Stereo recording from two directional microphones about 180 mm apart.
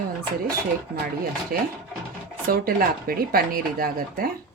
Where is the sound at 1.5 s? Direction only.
55° right (ahead or behind).